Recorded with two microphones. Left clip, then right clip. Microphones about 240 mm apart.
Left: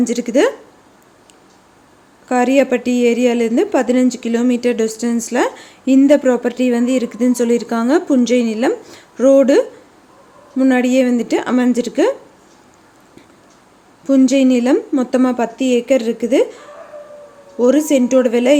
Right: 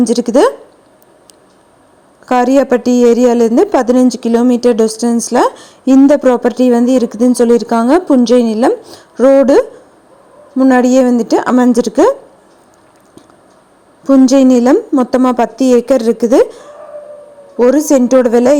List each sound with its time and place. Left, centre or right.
0.0 s speech: centre
2.2 s speech: right
7.6 s speech: centre
8.0 s a woman's voice: centre
10.6 s speech: centre
14.0 s speech: centre
17.6 s speech: centre